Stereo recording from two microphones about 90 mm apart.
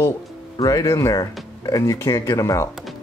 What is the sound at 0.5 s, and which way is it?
Speech, 40° left (ahead or behind).